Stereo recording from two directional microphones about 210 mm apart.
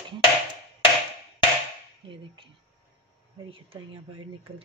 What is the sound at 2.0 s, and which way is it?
Speech, 25° right (ahead or behind).